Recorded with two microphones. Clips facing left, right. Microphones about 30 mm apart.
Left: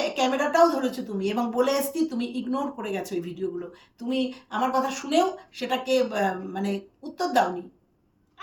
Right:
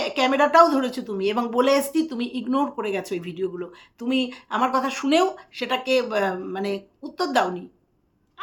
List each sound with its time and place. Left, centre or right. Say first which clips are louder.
0.0 s speech: right 4 dB; right
1.6 s speech: right 4 dB; right
2.1 s speech: right 4 dB; right
5.5 s speech: right 2 dB; right